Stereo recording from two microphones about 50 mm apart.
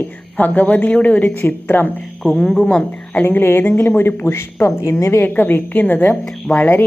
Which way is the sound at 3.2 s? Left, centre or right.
Left.